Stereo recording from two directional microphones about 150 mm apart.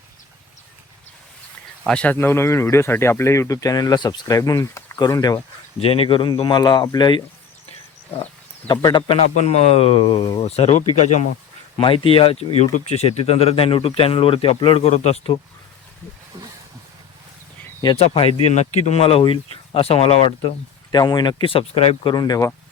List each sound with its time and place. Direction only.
1.9 s speech: 10° left (ahead or behind); by 5.4 s 25° left (ahead or behind)
5.8 s speech: 40° left (ahead or behind)
8.6 s speech: 30° left (ahead or behind)
9.4 s speech: 45° left (ahead or behind)
11.8 s speech: 35° left (ahead or behind)
17.9 s speech: 40° left (ahead or behind)
20.9 s speech: 25° left (ahead or behind)
22.1 s speech: 25° left (ahead or behind)